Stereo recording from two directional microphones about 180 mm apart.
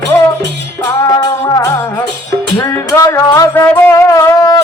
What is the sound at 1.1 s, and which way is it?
Music, 20° left (ahead or behind).